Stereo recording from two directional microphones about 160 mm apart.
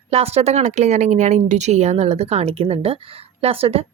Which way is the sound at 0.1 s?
40° right (ahead or behind).